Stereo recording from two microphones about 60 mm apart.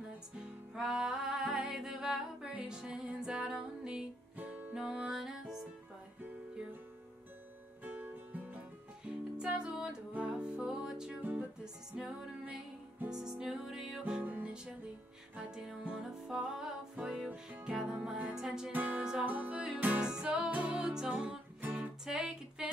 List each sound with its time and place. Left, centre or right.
0.4 s music: centre
4.4 s music: right
4.7 s music: centre
7.8 s music: right
9.0 s music: centre
13.1 s music: centre
14.2 s music: right
14.5 s music: centre
15.9 s music: centre
18.3 s music: centre
18.7 s music: right
20.0 s music: centre
20.3 s music: right
21.7 s music: centre